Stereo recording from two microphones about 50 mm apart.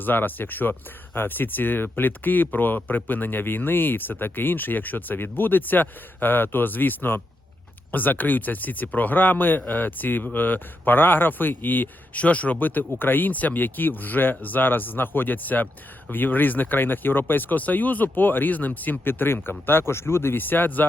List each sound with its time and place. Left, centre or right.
0.0 s speech: left
12.2 s speech: left
20.3 s speech: left